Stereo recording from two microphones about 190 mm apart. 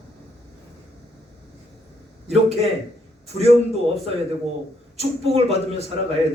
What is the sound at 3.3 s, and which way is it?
Speech, 30° right (ahead or behind).